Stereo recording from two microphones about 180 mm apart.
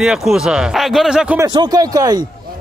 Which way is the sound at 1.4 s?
25° right (ahead or behind).